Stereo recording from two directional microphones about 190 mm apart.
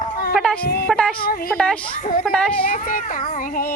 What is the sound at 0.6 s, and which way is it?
Speech, 55° left (ahead or behind).